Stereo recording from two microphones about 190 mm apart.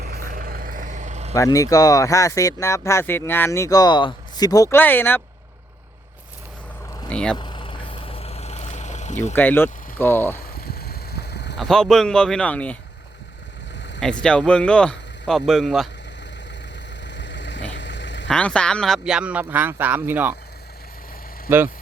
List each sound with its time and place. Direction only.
0.1 s vehicle: 50° right (ahead or behind)
1.4 s speech: 15° left (ahead or behind)
7.1 s speech: 5° left (ahead or behind)
7.3 s vehicle: 25° left (ahead or behind)
9.3 s speech: 10° left (ahead or behind)
10.6 s a sound: 55° left (ahead or behind)
11.6 s speech: centre (ahead or behind)
13.7 s vehicle: 70° left (ahead or behind)
14.0 s speech: 5° left (ahead or behind)
17.1 s vehicle: 70° left (ahead or behind)
18.3 s speech: 5° left (ahead or behind)